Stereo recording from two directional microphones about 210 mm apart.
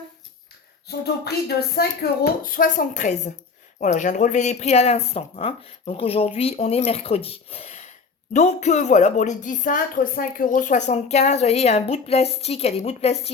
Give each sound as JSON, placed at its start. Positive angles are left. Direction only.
{"t": 0.9, "sound": "speech", "side_deg": 50}